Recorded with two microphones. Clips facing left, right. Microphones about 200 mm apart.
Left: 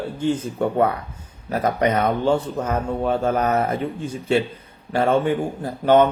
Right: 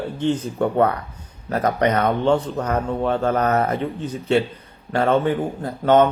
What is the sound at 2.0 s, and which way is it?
Mantra, 5° left (ahead or behind).